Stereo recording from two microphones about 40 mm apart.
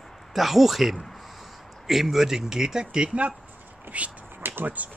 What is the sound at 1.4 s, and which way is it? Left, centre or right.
Speech, centre.